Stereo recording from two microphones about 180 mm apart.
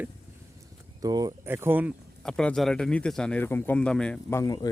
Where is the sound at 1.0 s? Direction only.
20° right (ahead or behind).